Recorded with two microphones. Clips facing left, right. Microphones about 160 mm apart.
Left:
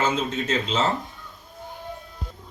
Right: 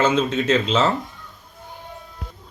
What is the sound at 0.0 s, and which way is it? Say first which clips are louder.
Speech: right 5 dB; 90° right.